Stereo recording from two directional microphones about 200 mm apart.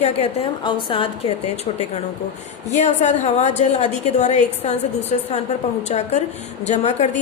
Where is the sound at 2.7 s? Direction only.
35° left (ahead or behind).